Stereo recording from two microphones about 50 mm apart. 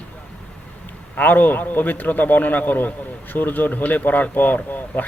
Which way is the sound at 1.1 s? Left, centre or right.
Left.